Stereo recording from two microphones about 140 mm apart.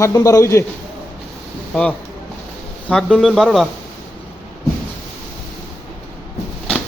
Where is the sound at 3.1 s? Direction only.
Centre (ahead or behind).